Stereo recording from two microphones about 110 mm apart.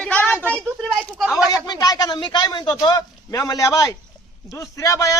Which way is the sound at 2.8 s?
35° left (ahead or behind).